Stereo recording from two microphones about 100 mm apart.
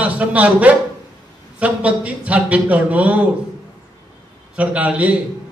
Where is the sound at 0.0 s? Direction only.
15° right (ahead or behind).